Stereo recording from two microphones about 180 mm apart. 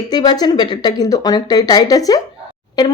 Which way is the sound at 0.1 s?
25° left (ahead or behind).